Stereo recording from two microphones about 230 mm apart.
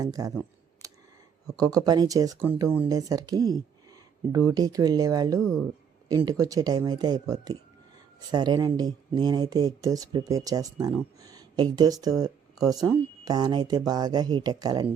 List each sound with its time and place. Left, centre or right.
0.0 s speech: centre